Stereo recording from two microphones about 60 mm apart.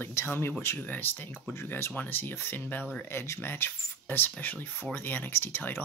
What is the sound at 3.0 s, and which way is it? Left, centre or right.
Speech, left.